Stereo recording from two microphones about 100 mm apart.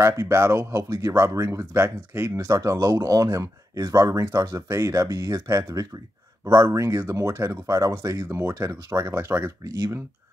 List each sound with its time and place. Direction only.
0.0 s speech: 30° right (ahead or behind)